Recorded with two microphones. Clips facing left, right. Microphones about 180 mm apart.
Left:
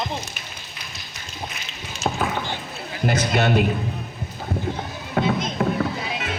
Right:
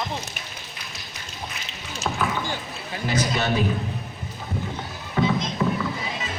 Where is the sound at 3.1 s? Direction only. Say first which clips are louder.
Left 3 dB; 60° left (ahead or behind).